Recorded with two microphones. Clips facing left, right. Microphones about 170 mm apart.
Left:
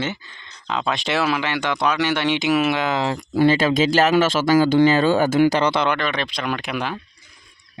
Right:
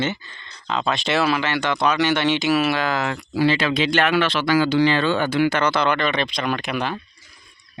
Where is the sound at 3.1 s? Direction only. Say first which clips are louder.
Left 5 dB; 50° left (ahead or behind); by 5.9 s 30° left (ahead or behind).